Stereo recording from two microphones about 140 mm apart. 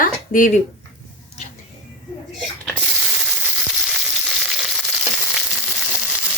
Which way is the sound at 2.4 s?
5° right (ahead or behind).